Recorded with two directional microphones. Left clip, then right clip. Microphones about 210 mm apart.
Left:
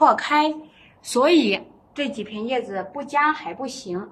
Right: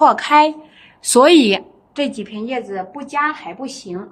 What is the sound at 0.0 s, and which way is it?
A woman's voice, 40° right (ahead or behind).